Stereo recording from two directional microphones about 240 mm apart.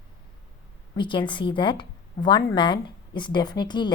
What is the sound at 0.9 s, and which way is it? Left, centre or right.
A woman's voice, centre.